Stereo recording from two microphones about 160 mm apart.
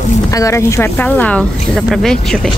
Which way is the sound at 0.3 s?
20° left (ahead or behind).